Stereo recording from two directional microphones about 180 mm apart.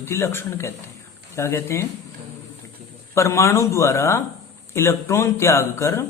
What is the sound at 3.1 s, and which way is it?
Speech, 15° left (ahead or behind).